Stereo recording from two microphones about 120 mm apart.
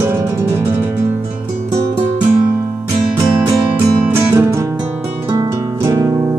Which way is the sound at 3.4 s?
20° right (ahead or behind).